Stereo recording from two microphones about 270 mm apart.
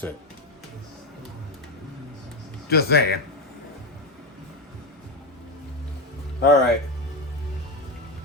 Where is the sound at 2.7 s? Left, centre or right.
Left.